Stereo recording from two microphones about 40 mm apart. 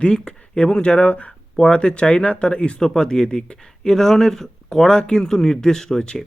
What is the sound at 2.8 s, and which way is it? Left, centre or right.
Speech, centre.